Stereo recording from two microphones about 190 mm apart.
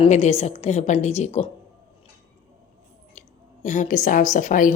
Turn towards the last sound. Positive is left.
turn(degrees=45)  # may be behind; listen again after turning